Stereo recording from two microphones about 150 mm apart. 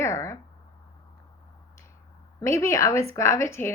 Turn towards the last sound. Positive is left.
turn(degrees=20)  # may be behind; listen again after turning